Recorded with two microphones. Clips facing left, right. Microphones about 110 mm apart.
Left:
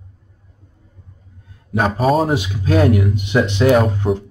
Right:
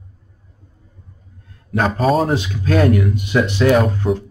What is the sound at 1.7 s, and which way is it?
Speech, 10° left (ahead or behind).